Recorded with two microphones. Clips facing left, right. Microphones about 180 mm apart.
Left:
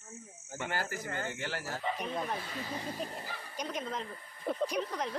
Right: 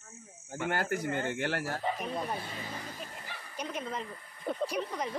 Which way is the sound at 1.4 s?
65° right (ahead or behind).